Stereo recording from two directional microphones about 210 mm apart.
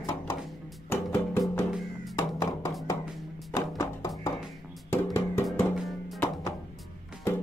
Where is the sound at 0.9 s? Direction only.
10° left (ahead or behind).